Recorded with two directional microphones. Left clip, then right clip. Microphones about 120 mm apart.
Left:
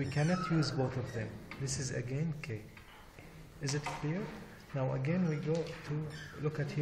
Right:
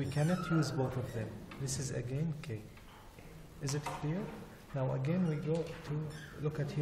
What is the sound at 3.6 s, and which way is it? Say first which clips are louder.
Speech: left 1 dB; 25° left (ahead or behind).